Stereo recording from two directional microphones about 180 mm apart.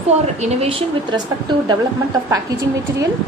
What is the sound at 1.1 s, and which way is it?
Speech, 25° right (ahead or behind).